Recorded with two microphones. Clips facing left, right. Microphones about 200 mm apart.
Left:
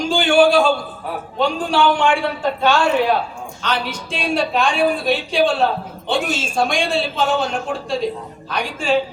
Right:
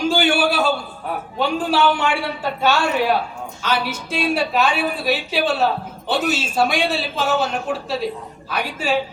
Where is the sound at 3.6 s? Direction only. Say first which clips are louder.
Right 1 dB; 5° right (ahead or behind).